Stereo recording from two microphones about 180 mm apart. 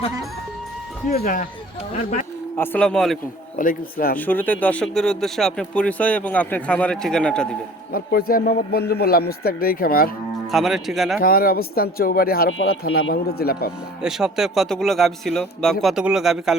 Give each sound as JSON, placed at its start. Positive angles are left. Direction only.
{"t": 1.2, "sound": "speech", "side_deg": 50}
{"t": 2.6, "sound": "speech", "side_deg": 5}
{"t": 3.6, "sound": "speech", "side_deg": 50}
{"t": 4.3, "sound": "speech", "side_deg": 10}
{"t": 7.9, "sound": "a man's voice", "side_deg": 55}
{"t": 10.5, "sound": "speech", "side_deg": 0}
{"t": 11.2, "sound": "a man's voice", "side_deg": 55}
{"t": 12.5, "sound": "a man's voice", "side_deg": 90}
{"t": 14.0, "sound": "speech", "side_deg": 0}